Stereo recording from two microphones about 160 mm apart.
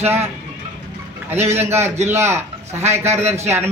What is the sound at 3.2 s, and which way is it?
Speech, 45° right (ahead or behind).